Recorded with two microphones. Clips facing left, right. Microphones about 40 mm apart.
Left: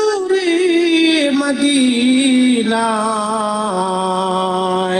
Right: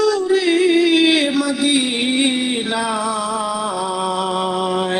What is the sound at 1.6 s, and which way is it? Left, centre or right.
Music, right.